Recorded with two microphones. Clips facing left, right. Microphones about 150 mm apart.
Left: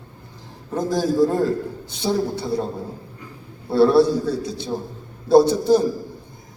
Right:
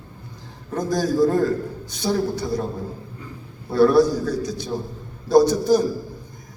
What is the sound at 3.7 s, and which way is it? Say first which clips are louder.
A man's voice: left 1 dB; 30° left (ahead or behind).